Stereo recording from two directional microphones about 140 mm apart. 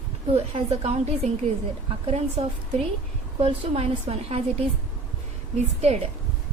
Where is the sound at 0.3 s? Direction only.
50° right (ahead or behind).